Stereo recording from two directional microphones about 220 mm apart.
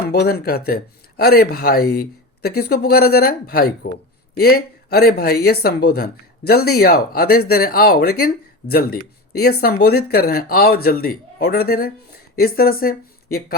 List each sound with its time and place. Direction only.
0.1 s speech: 45° left (ahead or behind)